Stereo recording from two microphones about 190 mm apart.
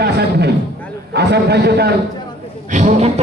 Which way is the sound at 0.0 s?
55° right (ahead or behind).